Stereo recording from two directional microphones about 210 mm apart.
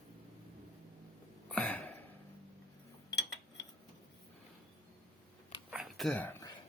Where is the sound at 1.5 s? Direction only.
5° left (ahead or behind).